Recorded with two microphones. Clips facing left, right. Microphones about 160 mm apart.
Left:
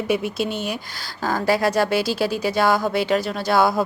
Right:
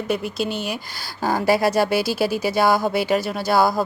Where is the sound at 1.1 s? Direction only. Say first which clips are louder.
Right 2 dB; 15° right (ahead or behind).